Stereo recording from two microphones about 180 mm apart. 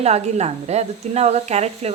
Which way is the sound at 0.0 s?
35° right (ahead or behind).